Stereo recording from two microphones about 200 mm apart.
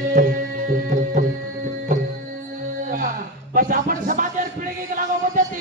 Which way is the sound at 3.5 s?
40° right (ahead or behind).